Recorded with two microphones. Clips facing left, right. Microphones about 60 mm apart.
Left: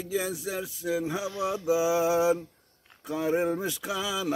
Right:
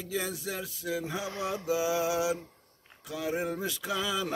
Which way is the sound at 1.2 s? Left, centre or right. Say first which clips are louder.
Left 4 dB; right.